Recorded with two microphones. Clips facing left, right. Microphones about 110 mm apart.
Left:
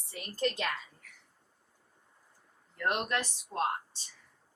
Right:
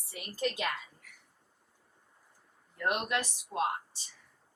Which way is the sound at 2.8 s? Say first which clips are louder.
Even; 10° right (ahead or behind).